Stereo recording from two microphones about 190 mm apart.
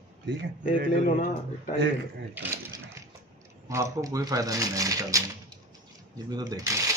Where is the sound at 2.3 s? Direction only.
15° right (ahead or behind).